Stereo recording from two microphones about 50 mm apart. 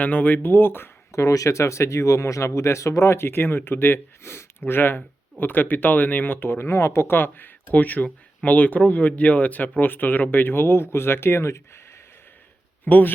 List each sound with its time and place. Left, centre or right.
0.0 s speech: left
1.1 s speech: left
4.6 s speech: left
7.2 s speech: left
12.8 s speech: left